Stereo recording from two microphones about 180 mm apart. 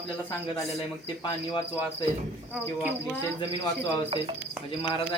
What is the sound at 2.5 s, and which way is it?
Speech, 5° right (ahead or behind).